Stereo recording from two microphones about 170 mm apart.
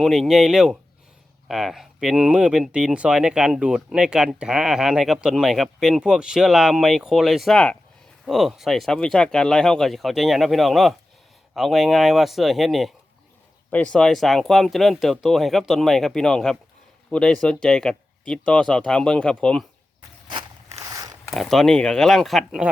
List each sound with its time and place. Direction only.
0.0 s speech: centre (ahead or behind)
20.8 s a sound: 20° right (ahead or behind)
21.2 s speech: centre (ahead or behind)